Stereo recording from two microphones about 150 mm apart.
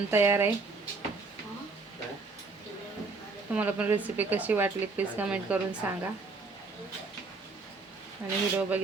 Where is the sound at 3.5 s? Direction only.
10° right (ahead or behind).